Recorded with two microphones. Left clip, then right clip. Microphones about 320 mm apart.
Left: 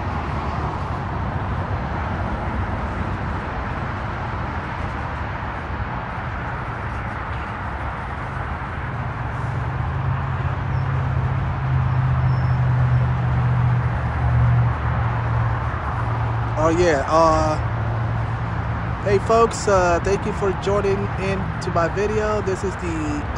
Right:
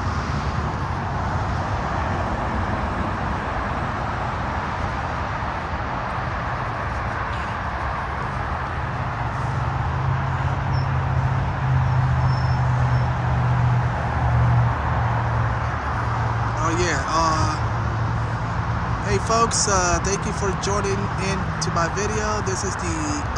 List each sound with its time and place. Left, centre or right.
16.5 s speech: centre
19.0 s speech: centre